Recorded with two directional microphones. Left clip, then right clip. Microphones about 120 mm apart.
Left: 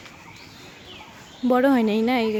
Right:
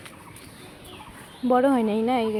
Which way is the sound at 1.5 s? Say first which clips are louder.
Left 1 dB; 50° left (ahead or behind).